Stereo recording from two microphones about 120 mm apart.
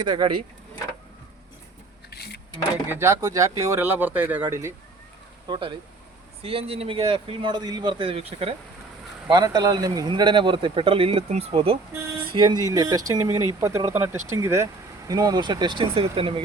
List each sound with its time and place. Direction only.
0.0 s speech: 40° right (ahead or behind)
2.8 s speech: 20° right (ahead or behind)
5.5 s speech: 45° right (ahead or behind)
9.3 s speech: 35° right (ahead or behind)
10.1 s speech: 40° right (ahead or behind)
12.2 s speech: 40° right (ahead or behind)